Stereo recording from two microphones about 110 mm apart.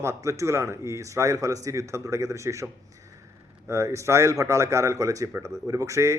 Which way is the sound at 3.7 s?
30° right (ahead or behind).